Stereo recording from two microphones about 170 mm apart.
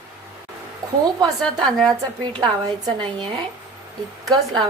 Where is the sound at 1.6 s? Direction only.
Centre (ahead or behind).